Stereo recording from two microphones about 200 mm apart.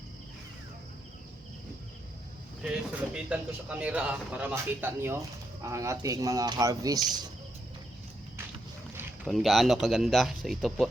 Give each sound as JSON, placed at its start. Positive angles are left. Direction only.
{"t": 2.6, "sound": "speech", "side_deg": -5}
{"t": 9.0, "sound": "speech", "side_deg": 0}